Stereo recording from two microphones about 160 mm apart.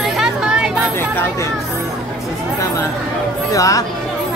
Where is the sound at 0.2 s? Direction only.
5° right (ahead or behind).